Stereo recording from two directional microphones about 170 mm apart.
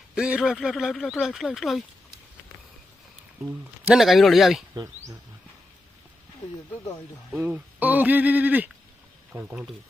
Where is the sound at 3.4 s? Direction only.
15° right (ahead or behind).